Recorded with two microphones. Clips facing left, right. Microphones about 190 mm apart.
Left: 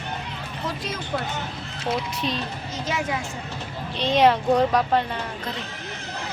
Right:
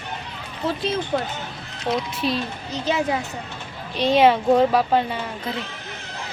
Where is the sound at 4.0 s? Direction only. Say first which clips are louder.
Right 3 dB; 5° right (ahead or behind).